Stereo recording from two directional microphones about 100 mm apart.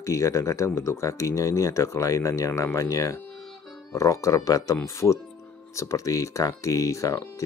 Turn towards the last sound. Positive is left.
turn(degrees=35)  # may be behind; listen again after turning